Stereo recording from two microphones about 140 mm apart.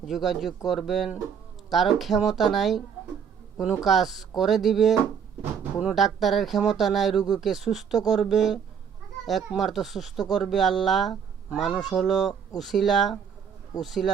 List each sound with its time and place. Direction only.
0.0 s speech: centre (ahead or behind)